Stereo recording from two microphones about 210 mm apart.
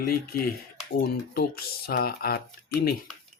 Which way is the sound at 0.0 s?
45° left (ahead or behind).